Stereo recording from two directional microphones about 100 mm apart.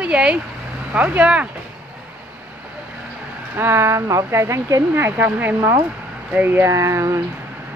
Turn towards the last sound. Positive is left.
turn(degrees=-30)  # may be behind; listen again after turning